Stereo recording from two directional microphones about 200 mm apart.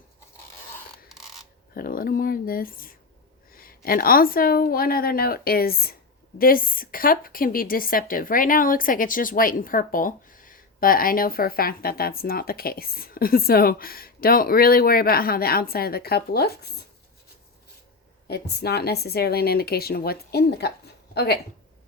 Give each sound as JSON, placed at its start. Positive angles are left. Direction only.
{"t": 1.0, "sound": "mechanisms", "side_deg": 0}
{"t": 1.7, "sound": "a woman's voice", "side_deg": 45}
{"t": 18.3, "sound": "a woman's voice", "side_deg": 55}